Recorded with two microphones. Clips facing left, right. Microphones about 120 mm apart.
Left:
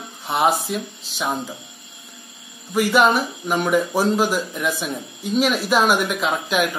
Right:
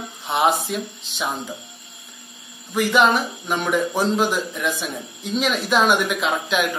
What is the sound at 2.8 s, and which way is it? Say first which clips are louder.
Speech: left 1 dB; 10° left (ahead or behind).